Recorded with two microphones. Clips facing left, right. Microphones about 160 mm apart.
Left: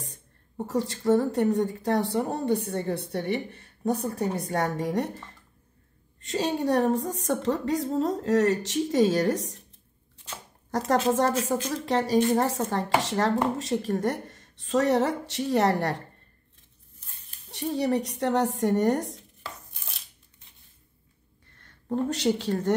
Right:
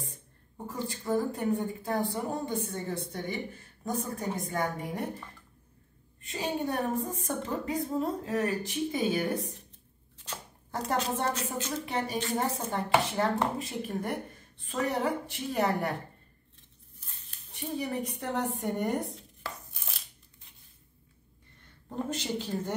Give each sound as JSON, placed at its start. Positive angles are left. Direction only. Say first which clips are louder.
{"t": 0.7, "sound": "a woman's voice", "louder": "left 8 dB", "side_deg": 75}
{"t": 6.2, "sound": "speech", "louder": "left 6 dB", "side_deg": 80}
{"t": 11.4, "sound": "speech", "louder": "left 7 dB", "side_deg": 90}
{"t": 17.5, "sound": "speech", "louder": "left 8 dB", "side_deg": 80}
{"t": 21.8, "sound": "a woman's voice", "louder": "left 9 dB", "side_deg": 75}